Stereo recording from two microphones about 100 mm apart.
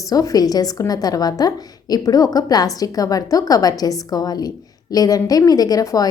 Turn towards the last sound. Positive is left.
turn(degrees=35)  # may be behind; listen again after turning